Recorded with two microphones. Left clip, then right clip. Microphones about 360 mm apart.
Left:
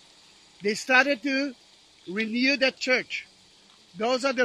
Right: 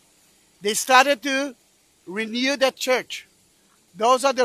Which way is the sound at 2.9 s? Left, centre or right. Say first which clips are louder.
Right 2 dB; right.